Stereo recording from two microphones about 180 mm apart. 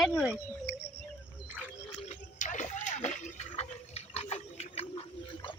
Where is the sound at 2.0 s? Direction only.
40° left (ahead or behind).